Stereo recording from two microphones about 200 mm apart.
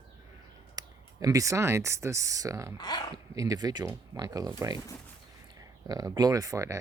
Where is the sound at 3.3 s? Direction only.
20° right (ahead or behind).